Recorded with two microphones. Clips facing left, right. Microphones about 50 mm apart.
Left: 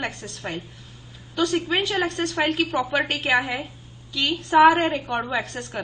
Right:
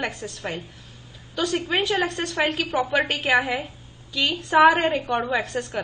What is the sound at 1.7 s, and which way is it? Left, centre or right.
A woman's voice, centre.